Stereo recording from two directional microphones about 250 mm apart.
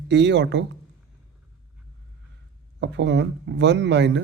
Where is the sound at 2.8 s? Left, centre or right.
Right.